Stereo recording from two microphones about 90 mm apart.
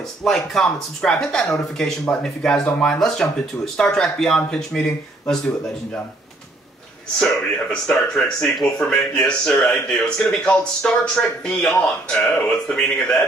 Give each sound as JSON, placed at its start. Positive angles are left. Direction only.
{"t": 0.2, "sound": "speech", "side_deg": 5}
{"t": 7.2, "sound": "speech", "side_deg": 10}